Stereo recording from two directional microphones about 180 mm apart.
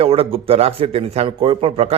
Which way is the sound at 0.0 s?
30° right (ahead or behind).